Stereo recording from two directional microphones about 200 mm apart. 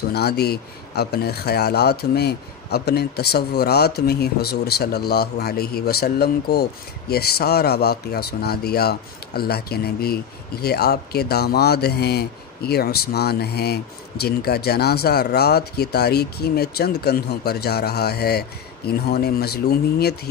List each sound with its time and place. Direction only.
0.1 s speech: 55° left (ahead or behind)